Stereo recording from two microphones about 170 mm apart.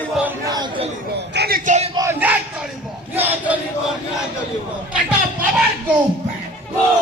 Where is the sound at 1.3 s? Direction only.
70° right (ahead or behind); by 1.9 s 45° right (ahead or behind).